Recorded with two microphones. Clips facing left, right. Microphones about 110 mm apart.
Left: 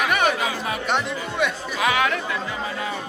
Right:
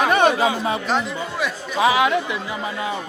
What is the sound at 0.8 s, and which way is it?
Speech, centre (ahead or behind).